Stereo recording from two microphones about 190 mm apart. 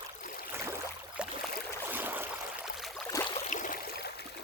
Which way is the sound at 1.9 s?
10° right (ahead or behind).